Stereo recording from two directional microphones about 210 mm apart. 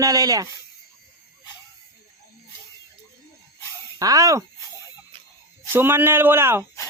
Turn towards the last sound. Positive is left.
turn(degrees=-10)  # may be behind; listen again after turning